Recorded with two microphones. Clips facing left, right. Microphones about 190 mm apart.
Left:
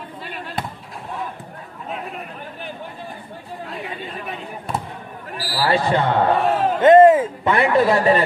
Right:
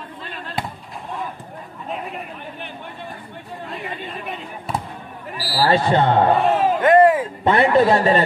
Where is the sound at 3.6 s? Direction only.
Centre (ahead or behind).